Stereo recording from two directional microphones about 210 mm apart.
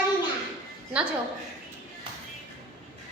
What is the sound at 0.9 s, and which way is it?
Speech, 5° right (ahead or behind).